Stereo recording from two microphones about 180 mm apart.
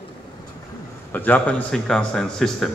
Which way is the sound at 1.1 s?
10° left (ahead or behind).